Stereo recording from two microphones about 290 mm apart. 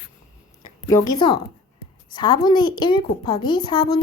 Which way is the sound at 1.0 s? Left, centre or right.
Centre.